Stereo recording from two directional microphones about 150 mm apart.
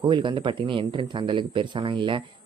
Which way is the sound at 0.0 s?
30° right (ahead or behind).